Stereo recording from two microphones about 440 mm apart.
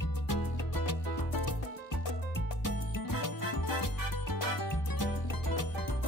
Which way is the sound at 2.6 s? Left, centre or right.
Left.